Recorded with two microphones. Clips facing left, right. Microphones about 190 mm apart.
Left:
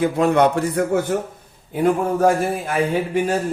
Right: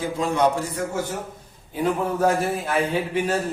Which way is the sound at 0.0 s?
60° left (ahead or behind).